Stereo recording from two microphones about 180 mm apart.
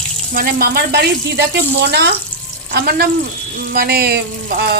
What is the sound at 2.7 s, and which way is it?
Speech, 60° right (ahead or behind).